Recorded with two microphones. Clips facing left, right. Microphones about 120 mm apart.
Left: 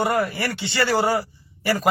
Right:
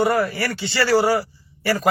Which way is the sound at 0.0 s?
20° left (ahead or behind).